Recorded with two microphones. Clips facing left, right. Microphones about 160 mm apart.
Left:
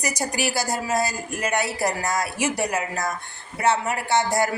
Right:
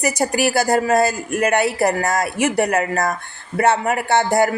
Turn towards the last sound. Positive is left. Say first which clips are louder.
# right 5 dB
turn(degrees=-60)  # may be behind; listen again after turning